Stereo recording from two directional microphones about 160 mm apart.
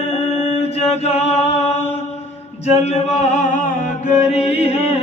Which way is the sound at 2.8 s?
40° left (ahead or behind).